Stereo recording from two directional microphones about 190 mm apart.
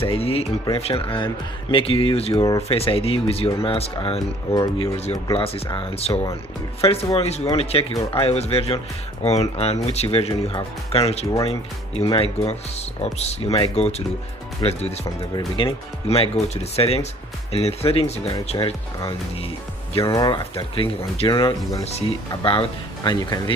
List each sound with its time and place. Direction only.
0.0 s speech: 30° left (ahead or behind)